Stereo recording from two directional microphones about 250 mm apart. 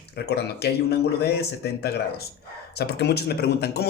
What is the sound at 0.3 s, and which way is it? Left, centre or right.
A man's voice, left.